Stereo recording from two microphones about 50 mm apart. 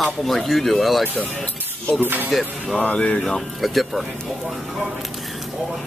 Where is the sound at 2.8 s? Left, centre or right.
Left.